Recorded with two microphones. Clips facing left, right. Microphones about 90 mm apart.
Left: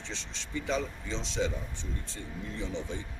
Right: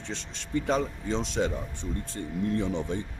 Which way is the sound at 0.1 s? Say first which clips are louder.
Right 8 dB; 50° right (ahead or behind).